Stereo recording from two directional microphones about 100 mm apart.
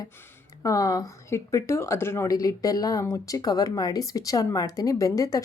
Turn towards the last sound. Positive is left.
turn(degrees=35)  # may be behind; listen again after turning